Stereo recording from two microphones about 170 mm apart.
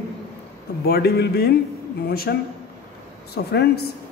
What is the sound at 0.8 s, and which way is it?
Speech, 65° left (ahead or behind).